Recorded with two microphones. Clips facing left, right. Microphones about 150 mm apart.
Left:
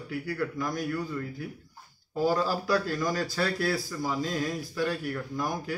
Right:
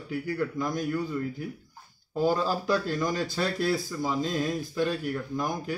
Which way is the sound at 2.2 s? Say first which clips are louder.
Right 1 dB; 20° right (ahead or behind).